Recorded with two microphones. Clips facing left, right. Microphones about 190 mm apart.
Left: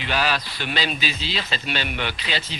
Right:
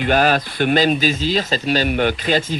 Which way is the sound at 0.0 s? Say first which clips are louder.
Right 8 dB; 50° right (ahead or behind).